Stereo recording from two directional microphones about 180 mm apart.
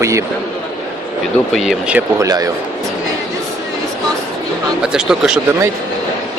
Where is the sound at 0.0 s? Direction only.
15° right (ahead or behind).